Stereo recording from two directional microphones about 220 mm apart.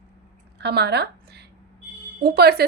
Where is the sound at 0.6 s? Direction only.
50° right (ahead or behind).